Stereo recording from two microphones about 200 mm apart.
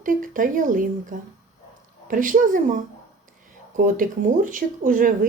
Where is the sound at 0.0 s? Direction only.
40° right (ahead or behind).